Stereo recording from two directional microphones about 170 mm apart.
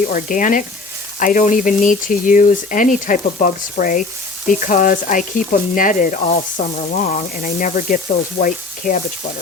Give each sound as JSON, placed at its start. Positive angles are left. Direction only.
{"t": 0.0, "sound": "speech", "side_deg": 50}